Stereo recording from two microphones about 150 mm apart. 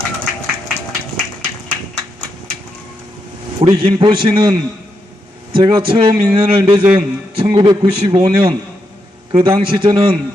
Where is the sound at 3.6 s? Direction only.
30° right (ahead or behind).